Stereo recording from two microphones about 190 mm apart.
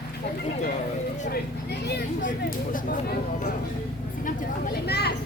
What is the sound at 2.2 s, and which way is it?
Speech, 45° left (ahead or behind).